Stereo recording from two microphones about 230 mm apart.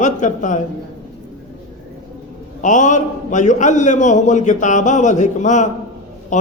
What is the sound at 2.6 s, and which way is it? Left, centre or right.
A man's voice, left.